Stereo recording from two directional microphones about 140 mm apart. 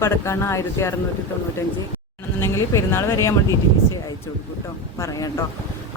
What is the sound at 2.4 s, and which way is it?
Speech, 20° left (ahead or behind).